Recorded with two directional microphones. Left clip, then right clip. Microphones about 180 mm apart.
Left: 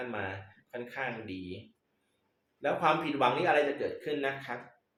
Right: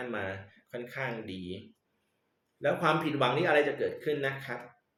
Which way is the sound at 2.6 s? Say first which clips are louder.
Even; 20° right (ahead or behind).